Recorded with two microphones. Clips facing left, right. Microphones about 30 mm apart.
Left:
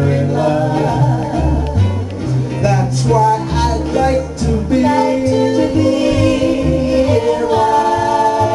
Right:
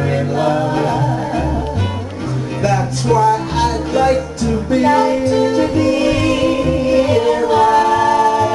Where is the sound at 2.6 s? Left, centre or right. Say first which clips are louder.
Even; centre.